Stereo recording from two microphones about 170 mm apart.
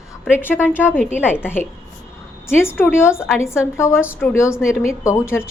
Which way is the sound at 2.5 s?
15° left (ahead or behind).